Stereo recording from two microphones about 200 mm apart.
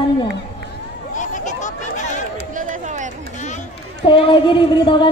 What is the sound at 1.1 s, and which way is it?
Chatter, 40° left (ahead or behind).